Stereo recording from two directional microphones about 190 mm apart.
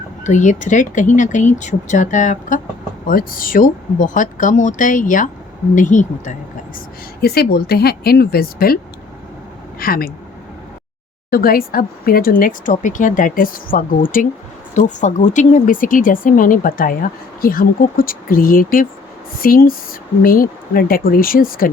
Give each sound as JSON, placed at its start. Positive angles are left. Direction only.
{"t": 0.3, "sound": "speech", "side_deg": 40}
{"t": 7.2, "sound": "speech", "side_deg": 55}
{"t": 11.3, "sound": "speech", "side_deg": 50}